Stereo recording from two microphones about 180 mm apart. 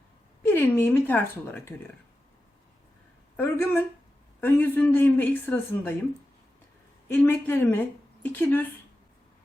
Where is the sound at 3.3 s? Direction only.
10° left (ahead or behind).